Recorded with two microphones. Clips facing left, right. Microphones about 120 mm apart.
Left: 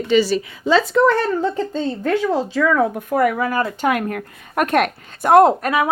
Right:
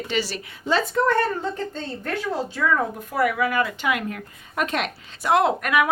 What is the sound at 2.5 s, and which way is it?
A woman's voice, 85° left.